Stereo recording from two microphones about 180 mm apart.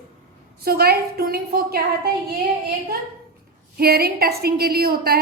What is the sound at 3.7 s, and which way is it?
A woman's voice, 60° right (ahead or behind).